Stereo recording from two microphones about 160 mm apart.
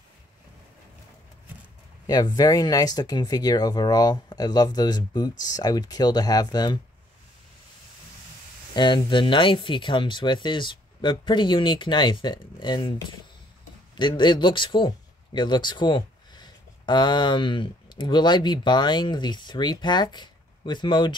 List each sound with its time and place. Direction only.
2.0 s speech: 25° left (ahead or behind)
8.7 s speech: 30° left (ahead or behind)
13.9 s speech: 30° left (ahead or behind)